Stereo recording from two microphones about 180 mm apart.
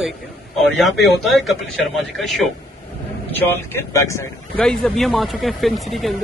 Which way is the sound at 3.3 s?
10° left (ahead or behind).